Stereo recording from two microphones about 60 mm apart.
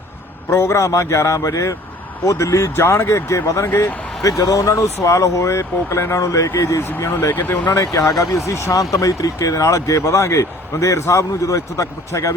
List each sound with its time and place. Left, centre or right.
0.5 s speech: left
4.2 s speech: left
7.8 s speech: left
8.2 s speech: left